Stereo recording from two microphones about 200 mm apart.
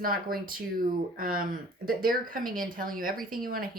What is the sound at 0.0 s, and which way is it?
Speech, 45° right (ahead or behind).